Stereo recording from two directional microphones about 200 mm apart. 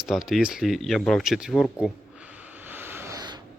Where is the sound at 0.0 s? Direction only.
Centre (ahead or behind).